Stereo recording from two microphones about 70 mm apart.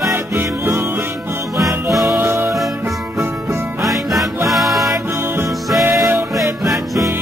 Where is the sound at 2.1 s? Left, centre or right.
Right.